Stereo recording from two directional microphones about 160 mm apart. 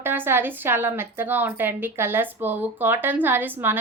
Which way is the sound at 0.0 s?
15° right (ahead or behind).